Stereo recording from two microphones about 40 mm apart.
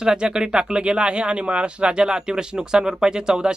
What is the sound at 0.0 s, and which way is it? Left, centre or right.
Speech, right.